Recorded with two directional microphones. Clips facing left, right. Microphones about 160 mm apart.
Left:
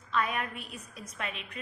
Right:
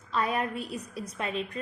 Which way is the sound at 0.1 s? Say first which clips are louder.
Right 3 dB; 35° right (ahead or behind).